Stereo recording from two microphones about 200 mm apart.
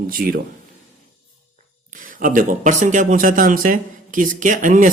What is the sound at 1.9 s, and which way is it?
Speech, 40° right (ahead or behind).